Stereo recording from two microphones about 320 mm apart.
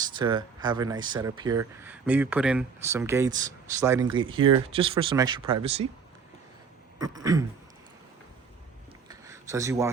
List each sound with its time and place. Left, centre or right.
0.0 s speech: centre
7.0 s speech: centre
9.0 s a sound: centre